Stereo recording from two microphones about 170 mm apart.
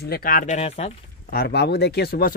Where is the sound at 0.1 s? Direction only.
55° left (ahead or behind); by 0.9 s 40° left (ahead or behind).